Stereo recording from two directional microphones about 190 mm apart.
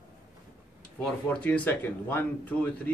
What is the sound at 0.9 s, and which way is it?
A man's voice, 10° left (ahead or behind).